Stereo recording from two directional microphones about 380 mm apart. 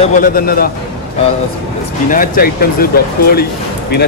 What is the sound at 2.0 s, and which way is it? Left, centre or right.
Speech, left.